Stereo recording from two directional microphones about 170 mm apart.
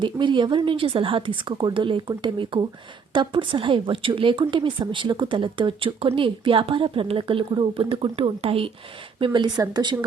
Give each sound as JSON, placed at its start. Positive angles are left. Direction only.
{"t": 0.0, "sound": "a woman's voice", "side_deg": -30}